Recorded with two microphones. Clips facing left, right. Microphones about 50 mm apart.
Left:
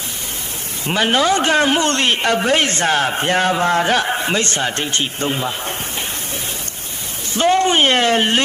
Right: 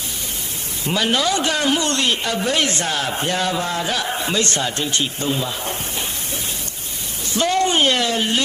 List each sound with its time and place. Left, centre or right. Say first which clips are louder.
0.9 s speech: left 4 dB; left
4.1 s speech: left 2 dB; left
7.3 s speech: left 3 dB; left